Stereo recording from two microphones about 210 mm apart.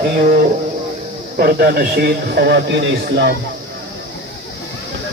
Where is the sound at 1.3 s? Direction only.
45° right (ahead or behind).